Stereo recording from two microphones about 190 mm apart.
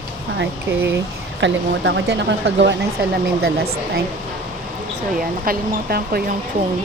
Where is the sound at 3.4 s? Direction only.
55° right (ahead or behind).